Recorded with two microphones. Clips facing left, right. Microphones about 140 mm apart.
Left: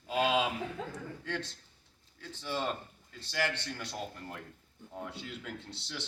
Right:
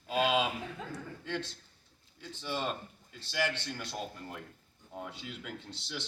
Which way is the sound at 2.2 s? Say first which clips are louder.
Even; 15° right (ahead or behind).